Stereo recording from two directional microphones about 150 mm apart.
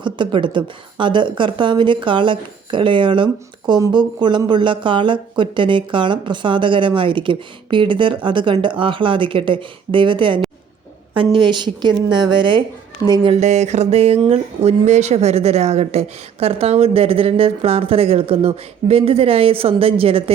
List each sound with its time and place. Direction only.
0.0 s speech: 30° right (ahead or behind)
13.4 s speech: 50° right (ahead or behind)